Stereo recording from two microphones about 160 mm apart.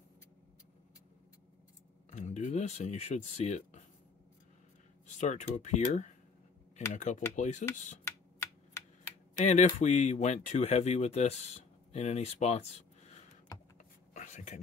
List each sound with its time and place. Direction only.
2.0 s speech: 45° left (ahead or behind)
5.0 s speech: 50° left (ahead or behind)
8.4 s typewriter: 20° left (ahead or behind)
9.4 s speech: 45° left (ahead or behind)
13.7 s a sound: 50° left (ahead or behind)